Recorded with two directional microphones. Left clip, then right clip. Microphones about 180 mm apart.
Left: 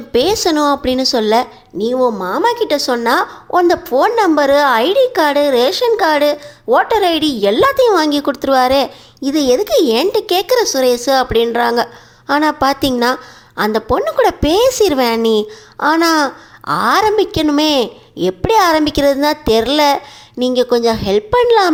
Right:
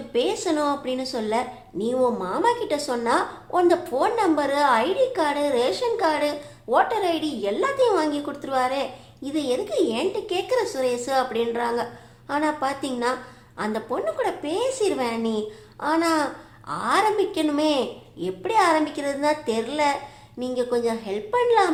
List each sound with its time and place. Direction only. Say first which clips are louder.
0.1 s a woman's voice: left 10 dB; 40° left (ahead or behind)